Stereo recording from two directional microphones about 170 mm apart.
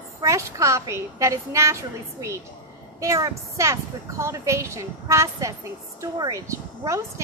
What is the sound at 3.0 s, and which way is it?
Speech, 20° right (ahead or behind).